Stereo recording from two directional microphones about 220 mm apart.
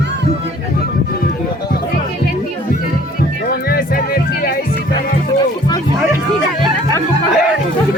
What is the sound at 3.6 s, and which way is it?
Music, 45° left (ahead or behind).